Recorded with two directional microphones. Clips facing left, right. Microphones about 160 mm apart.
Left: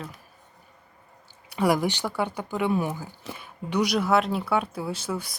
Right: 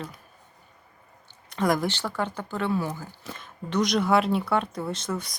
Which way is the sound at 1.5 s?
10° left (ahead or behind).